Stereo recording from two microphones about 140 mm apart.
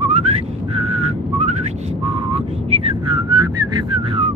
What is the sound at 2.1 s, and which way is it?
Whistling, 40° right (ahead or behind).